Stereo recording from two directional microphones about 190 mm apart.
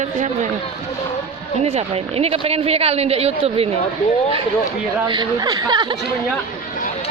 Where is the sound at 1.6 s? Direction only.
30° right (ahead or behind).